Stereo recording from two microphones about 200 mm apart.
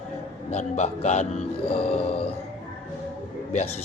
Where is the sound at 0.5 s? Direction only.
35° left (ahead or behind).